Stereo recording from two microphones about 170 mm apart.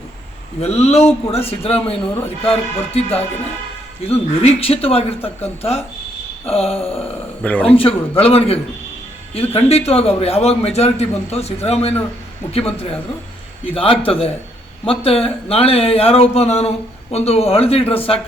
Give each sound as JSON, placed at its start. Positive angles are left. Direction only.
{"t": 0.6, "sound": "a man's voice", "side_deg": 40}
{"t": 7.4, "sound": "a man's voice", "side_deg": 10}
{"t": 7.8, "sound": "a man's voice", "side_deg": 35}